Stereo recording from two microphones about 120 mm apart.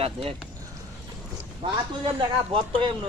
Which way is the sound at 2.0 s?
45° right (ahead or behind).